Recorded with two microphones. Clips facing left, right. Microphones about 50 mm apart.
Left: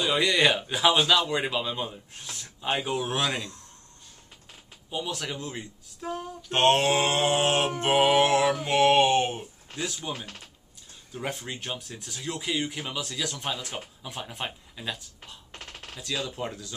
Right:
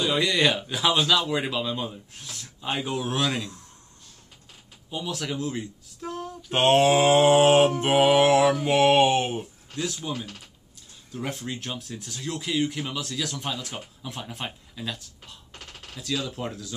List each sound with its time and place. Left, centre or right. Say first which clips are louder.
0.0 s speech: even; centre
4.9 s speech: right 2 dB; centre
6.5 s speech: right 3 dB; centre
9.8 s speech: right 3 dB; centre
15.5 s gunshot: left 1 dB; left
16.0 s speech: right 2 dB; centre